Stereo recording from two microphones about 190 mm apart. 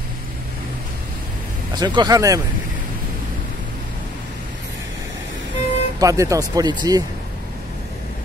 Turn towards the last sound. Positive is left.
turn(degrees=-20)  # may be behind; listen again after turning